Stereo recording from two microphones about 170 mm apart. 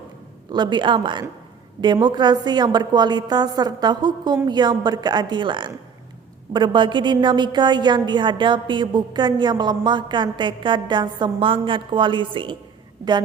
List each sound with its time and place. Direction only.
0.5 s a woman's voice: 25° right (ahead or behind)